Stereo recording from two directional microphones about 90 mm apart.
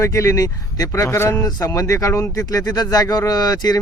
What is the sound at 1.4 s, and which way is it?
Speech, 45° left (ahead or behind).